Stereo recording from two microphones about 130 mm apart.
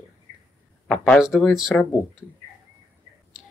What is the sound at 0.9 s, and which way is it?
Speech, 5° left (ahead or behind).